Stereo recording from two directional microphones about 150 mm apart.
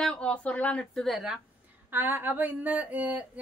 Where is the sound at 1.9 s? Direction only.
15° right (ahead or behind).